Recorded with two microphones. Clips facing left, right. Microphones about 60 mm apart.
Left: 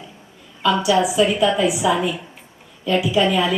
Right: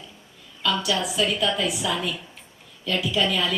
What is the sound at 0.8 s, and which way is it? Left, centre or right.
A woman's voice, centre.